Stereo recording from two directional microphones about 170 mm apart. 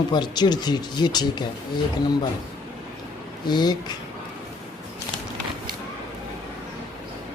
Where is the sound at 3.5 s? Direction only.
25° left (ahead or behind).